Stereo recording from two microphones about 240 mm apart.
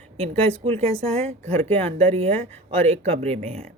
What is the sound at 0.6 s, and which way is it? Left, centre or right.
A woman's voice, right.